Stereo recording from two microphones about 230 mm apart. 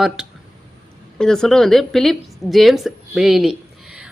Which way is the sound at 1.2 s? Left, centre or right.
Centre.